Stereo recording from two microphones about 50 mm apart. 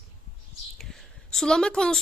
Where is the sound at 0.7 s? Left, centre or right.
Centre.